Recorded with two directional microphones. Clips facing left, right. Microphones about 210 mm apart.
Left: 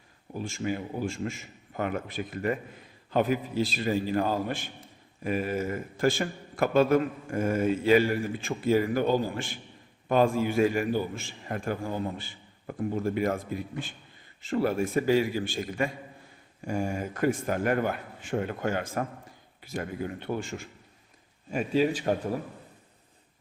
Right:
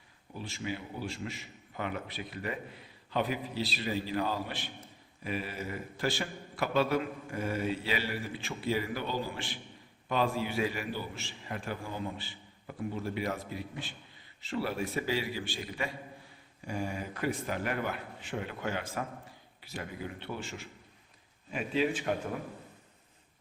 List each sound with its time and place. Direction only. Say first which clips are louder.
0.3 s a man's voice: left 7 dB; 45° left (ahead or behind)